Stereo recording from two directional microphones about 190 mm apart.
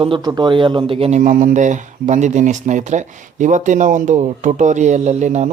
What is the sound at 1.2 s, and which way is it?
Speech, 45° right (ahead or behind).